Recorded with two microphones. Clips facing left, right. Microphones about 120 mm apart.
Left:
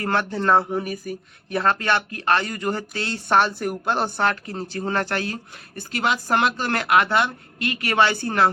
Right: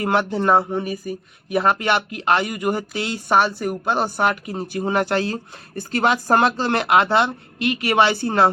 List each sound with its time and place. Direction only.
0.0 s speech: 20° right (ahead or behind)
0.6 s speech: centre (ahead or behind)
1.5 s speech: 15° right (ahead or behind)
4.2 s speech: 15° right (ahead or behind)
5.7 s speech: 45° right (ahead or behind)
6.6 s speech: 20° right (ahead or behind)